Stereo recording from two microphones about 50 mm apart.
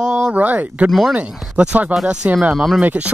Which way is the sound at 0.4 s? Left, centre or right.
Right.